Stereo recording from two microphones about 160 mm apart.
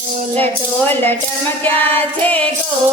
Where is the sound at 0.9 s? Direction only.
15° left (ahead or behind).